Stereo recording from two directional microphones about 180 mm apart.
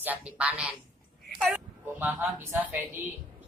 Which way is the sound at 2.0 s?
10° right (ahead or behind).